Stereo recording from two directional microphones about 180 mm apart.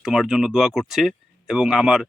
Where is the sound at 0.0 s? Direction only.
5° right (ahead or behind).